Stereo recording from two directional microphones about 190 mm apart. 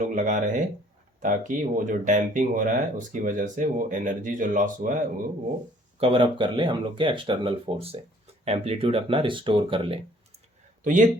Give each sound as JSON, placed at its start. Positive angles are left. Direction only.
{"t": 0.0, "sound": "speech", "side_deg": -40}
{"t": 6.0, "sound": "speech", "side_deg": -30}
{"t": 10.8, "sound": "speech", "side_deg": -40}